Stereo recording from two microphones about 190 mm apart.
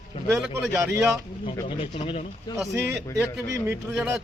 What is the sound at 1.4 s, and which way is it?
Speech, 25° left (ahead or behind).